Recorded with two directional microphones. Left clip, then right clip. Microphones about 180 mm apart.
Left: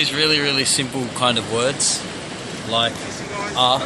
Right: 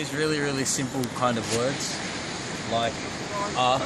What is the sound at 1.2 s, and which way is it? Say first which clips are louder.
Speech: left 7 dB; 10° right (ahead or behind).